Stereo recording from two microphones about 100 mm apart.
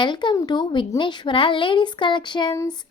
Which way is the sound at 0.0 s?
50° left (ahead or behind).